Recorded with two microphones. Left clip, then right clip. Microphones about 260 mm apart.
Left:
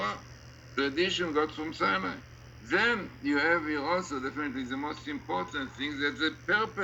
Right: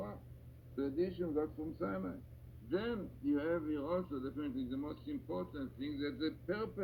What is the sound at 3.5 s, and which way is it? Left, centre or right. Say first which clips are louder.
Speech: left 9 dB; left.